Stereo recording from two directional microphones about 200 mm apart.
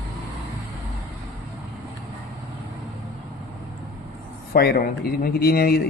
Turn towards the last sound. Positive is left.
turn(degrees=50)  # may be behind; listen again after turning